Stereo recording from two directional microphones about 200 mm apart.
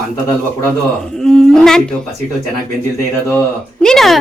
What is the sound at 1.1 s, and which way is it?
Speech, 5° left (ahead or behind).